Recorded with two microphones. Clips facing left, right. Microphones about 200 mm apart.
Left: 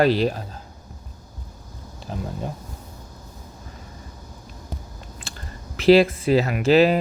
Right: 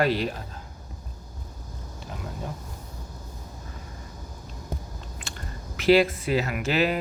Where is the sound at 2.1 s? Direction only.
30° left (ahead or behind).